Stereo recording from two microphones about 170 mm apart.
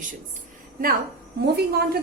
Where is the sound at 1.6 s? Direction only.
70° right (ahead or behind).